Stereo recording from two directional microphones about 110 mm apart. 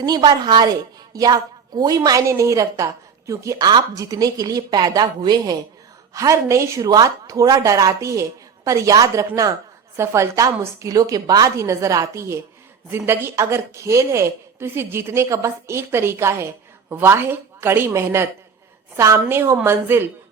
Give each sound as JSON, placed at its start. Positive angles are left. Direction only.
{"t": 0.0, "sound": "a woman's voice", "side_deg": -40}